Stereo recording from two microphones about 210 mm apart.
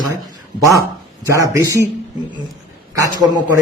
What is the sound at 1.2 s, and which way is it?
Speech, 15° right (ahead or behind).